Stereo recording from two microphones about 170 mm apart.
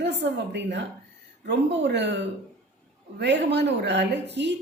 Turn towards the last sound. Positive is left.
turn(degrees=-90)